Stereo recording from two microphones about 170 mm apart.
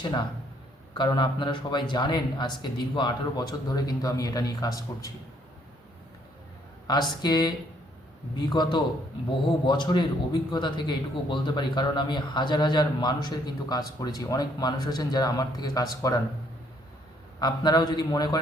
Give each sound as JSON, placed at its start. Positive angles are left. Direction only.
{"t": 0.0, "sound": "a man's voice", "side_deg": 25}
{"t": 6.8, "sound": "a man's voice", "side_deg": 25}
{"t": 17.4, "sound": "a man's voice", "side_deg": 25}